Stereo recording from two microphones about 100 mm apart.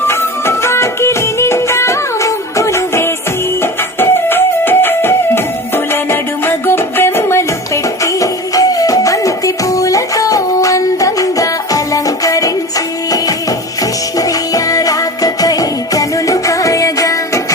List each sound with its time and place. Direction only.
0.1 s music: 25° left (ahead or behind)
14.2 s music: 35° left (ahead or behind)